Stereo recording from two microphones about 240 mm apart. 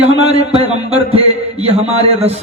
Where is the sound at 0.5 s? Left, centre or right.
Right.